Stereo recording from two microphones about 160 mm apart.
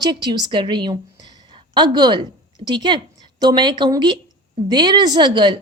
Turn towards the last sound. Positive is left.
turn(degrees=-30)  # may be behind; listen again after turning